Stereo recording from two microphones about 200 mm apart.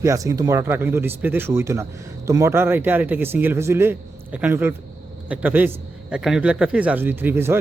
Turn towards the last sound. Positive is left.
turn(degrees=-10)  # may be behind; listen again after turning